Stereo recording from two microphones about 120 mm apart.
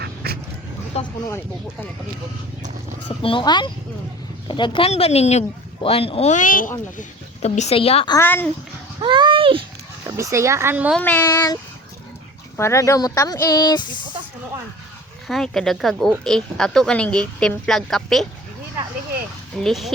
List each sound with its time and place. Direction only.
0.9 s a sound: 60° left (ahead or behind)
3.1 s speech: 45° left (ahead or behind)
4.9 s speech: 60° left (ahead or behind)
5.8 s a woman's voice: 50° left (ahead or behind); by 7.8 s 70° left (ahead or behind)
7.8 s speech: 55° left (ahead or behind)
8.2 s speech: 15° left (ahead or behind)
9.0 s speech: 40° right (ahead or behind)
10.1 s speech: 25° right (ahead or behind)
10.9 s speech: 15° left (ahead or behind)
11.3 s speech: 30° left (ahead or behind)
12.5 s speech: 25° left (ahead or behind)
15.3 s speech: 5° left (ahead or behind)
19.5 s speech: centre (ahead or behind)